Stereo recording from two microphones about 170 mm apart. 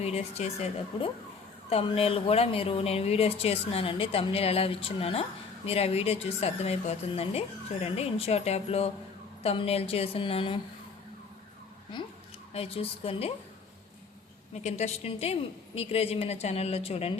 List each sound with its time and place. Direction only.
0.0 s speech: 40° left (ahead or behind)
11.9 s speech: 25° left (ahead or behind)
14.5 s speech: 40° left (ahead or behind)